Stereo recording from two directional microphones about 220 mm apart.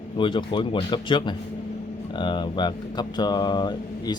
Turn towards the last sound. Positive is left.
turn(degrees=20)  # may be behind; listen again after turning